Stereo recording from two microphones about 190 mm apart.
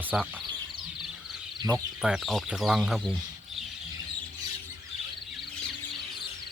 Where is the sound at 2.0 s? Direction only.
Centre (ahead or behind).